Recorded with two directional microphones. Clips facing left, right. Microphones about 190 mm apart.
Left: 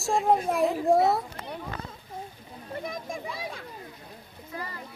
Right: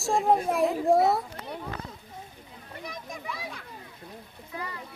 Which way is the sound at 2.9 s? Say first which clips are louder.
Even; 25° left (ahead or behind).